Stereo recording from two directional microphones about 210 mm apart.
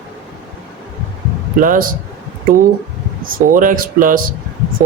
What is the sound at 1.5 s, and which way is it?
Speech, 40° right (ahead or behind).